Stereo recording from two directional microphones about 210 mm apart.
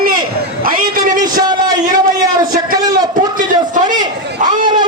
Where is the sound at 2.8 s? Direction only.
20° right (ahead or behind).